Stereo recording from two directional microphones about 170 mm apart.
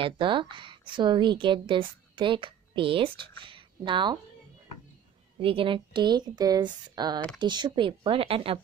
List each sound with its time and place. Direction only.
0.0 s a woman's voice: 30° right (ahead or behind)
5.4 s a woman's voice: 30° right (ahead or behind)